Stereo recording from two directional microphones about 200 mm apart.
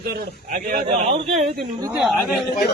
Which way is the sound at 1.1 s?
30° right (ahead or behind).